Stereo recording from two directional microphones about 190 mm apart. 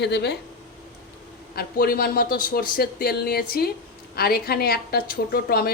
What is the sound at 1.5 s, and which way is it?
A woman's voice, 50° left (ahead or behind).